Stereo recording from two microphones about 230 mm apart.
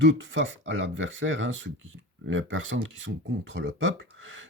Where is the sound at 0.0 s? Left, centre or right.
Right.